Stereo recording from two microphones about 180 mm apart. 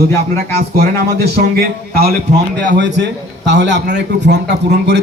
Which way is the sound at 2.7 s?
75° right (ahead or behind).